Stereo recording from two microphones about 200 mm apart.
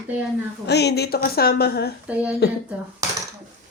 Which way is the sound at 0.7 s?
55° left (ahead or behind).